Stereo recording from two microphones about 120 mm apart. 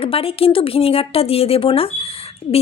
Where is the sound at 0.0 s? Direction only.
50° left (ahead or behind).